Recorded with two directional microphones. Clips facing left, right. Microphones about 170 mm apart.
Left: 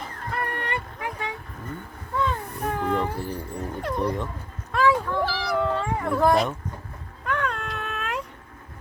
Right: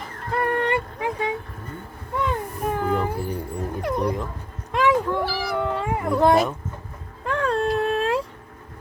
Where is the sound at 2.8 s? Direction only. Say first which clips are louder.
Even; 5° right (ahead or behind).